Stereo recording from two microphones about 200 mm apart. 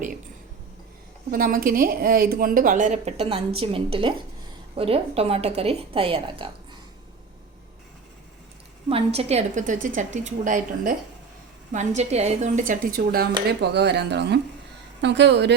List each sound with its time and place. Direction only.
1.3 s a woman's voice: 45° right (ahead or behind); by 6.5 s 25° right (ahead or behind)
8.9 s a woman's voice: 30° right (ahead or behind); by 15.5 s 60° right (ahead or behind)